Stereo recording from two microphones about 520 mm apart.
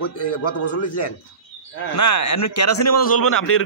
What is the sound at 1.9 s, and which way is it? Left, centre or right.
A man's voice, left.